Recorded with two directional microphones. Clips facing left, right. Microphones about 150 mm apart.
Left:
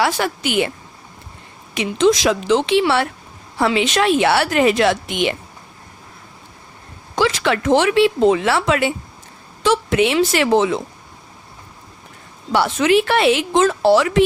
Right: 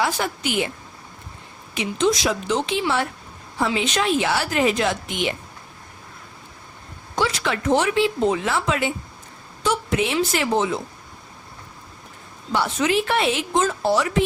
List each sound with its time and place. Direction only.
0.0 s a woman's voice: 80° left
1.7 s a woman's voice: 80° left
7.2 s a woman's voice: 90° left
12.5 s a woman's voice: 80° left